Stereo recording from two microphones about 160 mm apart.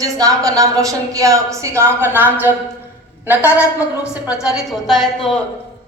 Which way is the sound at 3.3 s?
10° right (ahead or behind).